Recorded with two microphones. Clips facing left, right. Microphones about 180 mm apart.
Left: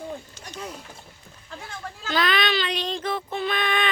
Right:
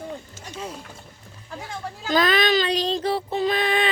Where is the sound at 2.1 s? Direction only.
45° right (ahead or behind).